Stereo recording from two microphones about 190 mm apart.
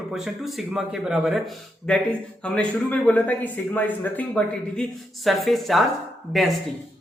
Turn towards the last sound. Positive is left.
turn(degrees=0)  # may be behind; listen again after turning